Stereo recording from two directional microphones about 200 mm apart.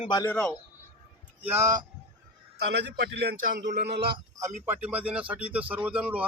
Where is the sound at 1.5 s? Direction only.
15° right (ahead or behind).